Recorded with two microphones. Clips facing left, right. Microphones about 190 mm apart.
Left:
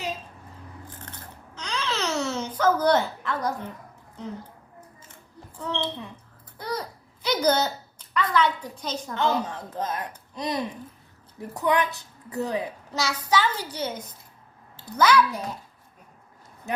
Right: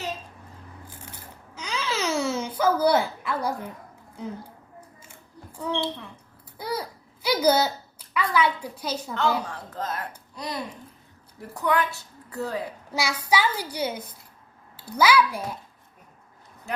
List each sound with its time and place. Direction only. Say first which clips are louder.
0.9 s scissors: left 2 dB; 10° right (ahead or behind)
1.5 s babbling: even; 10° right (ahead or behind)
4.2 s a child's voice: right 1 dB; 10° right (ahead or behind)
5.5 s a child's voice: right 2 dB; 10° right (ahead or behind)
9.4 s a child's voice: left 3 dB; 20° left (ahead or behind)
12.9 s a child's voice: even; 10° right (ahead or behind)